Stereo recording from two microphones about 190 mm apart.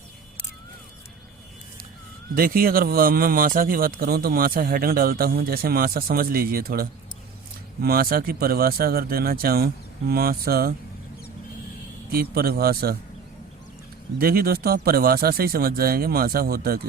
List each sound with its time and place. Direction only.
2.3 s speech: 50° right (ahead or behind)
12.1 s speech: 50° right (ahead or behind)
14.2 s speech: 50° right (ahead or behind)